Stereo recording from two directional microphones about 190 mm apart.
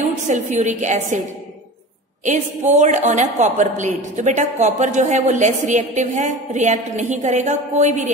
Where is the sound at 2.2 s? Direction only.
40° right (ahead or behind).